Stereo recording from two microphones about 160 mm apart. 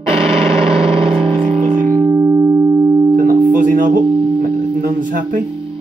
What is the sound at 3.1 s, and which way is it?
Music, 60° right (ahead or behind).